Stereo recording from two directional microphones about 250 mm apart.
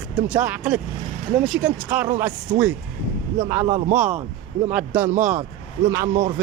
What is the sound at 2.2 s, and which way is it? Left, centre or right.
Speech, centre.